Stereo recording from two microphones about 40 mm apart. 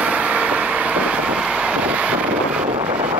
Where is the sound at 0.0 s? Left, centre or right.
Right.